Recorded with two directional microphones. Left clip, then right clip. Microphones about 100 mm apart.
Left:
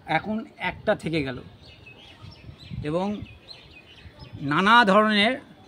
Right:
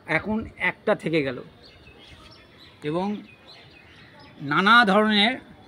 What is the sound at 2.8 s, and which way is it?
Speech, 75° left (ahead or behind).